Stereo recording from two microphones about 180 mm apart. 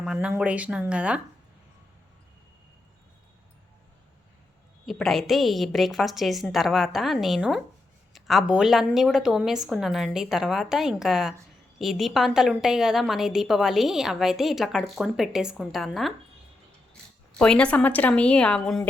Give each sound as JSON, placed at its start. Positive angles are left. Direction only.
{"t": 0.0, "sound": "speech", "side_deg": -5}
{"t": 4.9, "sound": "a woman's voice", "side_deg": 0}
{"t": 17.3, "sound": "a woman's voice", "side_deg": 5}